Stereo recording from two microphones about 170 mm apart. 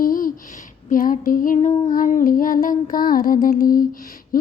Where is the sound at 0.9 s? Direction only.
50° left (ahead or behind).